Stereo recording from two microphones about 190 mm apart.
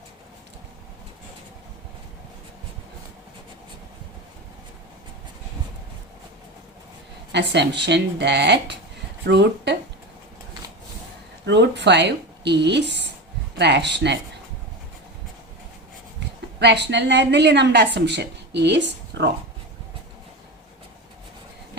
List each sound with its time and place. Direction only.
7.3 s a woman's voice: 65° right (ahead or behind)
11.4 s a woman's voice: 65° right (ahead or behind)
16.6 s a woman's voice: 65° right (ahead or behind)